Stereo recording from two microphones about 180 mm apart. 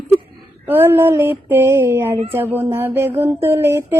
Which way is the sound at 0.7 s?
10° right (ahead or behind).